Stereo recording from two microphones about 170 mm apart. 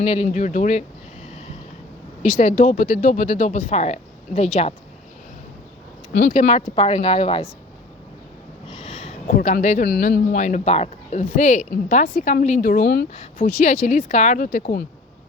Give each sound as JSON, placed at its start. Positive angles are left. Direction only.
{"t": 0.0, "sound": "speech", "side_deg": 40}
{"t": 1.3, "sound": "a sound", "side_deg": 40}
{"t": 2.2, "sound": "speech", "side_deg": 50}
{"t": 6.2, "sound": "speech", "side_deg": 45}
{"t": 8.6, "sound": "a sound", "side_deg": 35}
{"t": 9.3, "sound": "speech", "side_deg": 50}
{"t": 12.8, "sound": "speech", "side_deg": 80}
{"t": 13.1, "sound": "speech", "side_deg": 50}